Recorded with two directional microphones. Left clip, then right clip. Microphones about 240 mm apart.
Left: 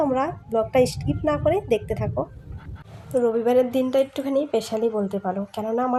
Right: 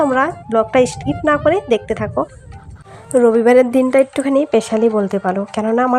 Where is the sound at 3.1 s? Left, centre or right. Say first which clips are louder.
Right 9 dB; right.